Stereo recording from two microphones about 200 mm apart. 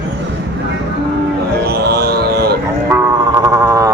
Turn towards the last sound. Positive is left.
turn(degrees=-15)  # may be behind; listen again after turning